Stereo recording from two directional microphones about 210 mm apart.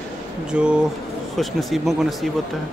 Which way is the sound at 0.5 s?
5° right (ahead or behind).